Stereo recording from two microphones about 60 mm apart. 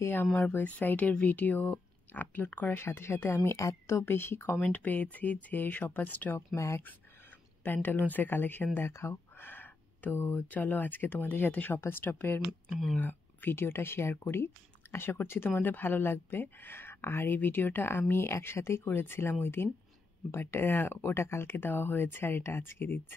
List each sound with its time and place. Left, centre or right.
0.0 s speech: left
2.8 s speech: left
3.2 s speech: left
3.5 s a woman's voice: left
4.0 s speech: left
4.6 s speech: left
6.3 s speech: left
7.6 s speech: left
8.7 s a sound: left
10.5 s speech: left